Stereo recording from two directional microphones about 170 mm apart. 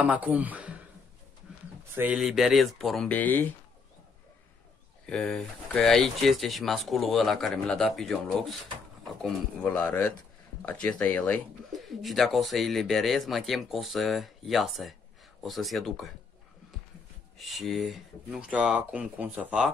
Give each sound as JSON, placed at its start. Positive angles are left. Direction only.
{"t": 0.0, "sound": "speech", "side_deg": -10}
{"t": 2.0, "sound": "speech", "side_deg": -5}
{"t": 5.0, "sound": "speech", "side_deg": 5}
{"t": 17.4, "sound": "speech", "side_deg": 0}